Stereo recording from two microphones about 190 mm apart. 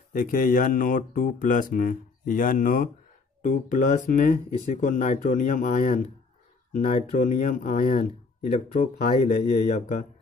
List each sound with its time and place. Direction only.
0.1 s speech: 45° left (ahead or behind)